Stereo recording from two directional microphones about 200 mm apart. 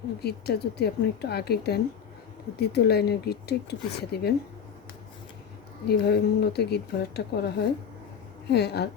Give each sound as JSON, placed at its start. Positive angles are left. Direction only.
{"t": 0.2, "sound": "speech", "side_deg": 55}
{"t": 5.9, "sound": "speech", "side_deg": 55}